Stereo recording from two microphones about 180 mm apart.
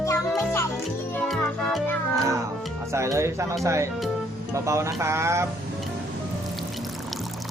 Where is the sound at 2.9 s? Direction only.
15° right (ahead or behind).